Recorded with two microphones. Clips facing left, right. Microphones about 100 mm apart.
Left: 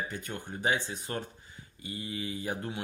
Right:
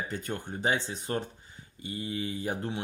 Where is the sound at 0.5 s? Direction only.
25° right (ahead or behind).